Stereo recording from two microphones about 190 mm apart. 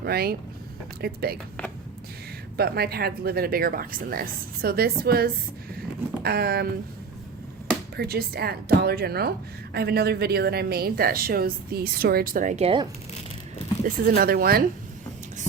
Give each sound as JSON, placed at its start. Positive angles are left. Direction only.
{"t": 0.0, "sound": "speech", "side_deg": -55}
{"t": 2.6, "sound": "speech", "side_deg": -55}
{"t": 7.9, "sound": "speech", "side_deg": -55}
{"t": 13.8, "sound": "speech", "side_deg": -50}